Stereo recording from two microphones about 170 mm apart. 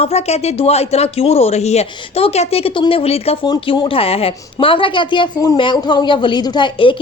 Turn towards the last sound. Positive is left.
turn(degrees=30)  # may be behind; listen again after turning